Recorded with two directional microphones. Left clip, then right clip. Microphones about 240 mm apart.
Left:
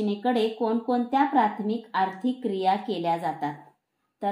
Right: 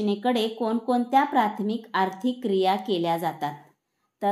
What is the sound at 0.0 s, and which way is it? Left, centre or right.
A woman's voice, right.